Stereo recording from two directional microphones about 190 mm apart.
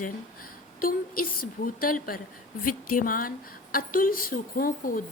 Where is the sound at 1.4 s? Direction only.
45° left (ahead or behind).